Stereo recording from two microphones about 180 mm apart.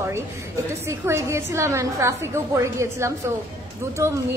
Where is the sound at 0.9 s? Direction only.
15° right (ahead or behind).